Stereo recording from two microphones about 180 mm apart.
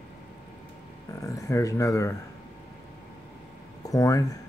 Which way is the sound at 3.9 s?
20° left (ahead or behind).